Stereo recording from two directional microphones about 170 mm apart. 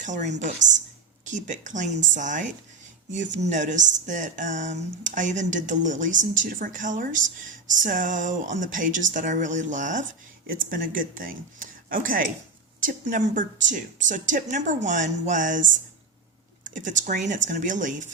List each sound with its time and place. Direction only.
0.0 s a woman's voice: 45° right (ahead or behind)
16.6 s speech: 50° right (ahead or behind)